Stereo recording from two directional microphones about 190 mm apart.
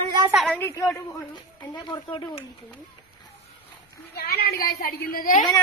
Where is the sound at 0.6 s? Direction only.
15° left (ahead or behind).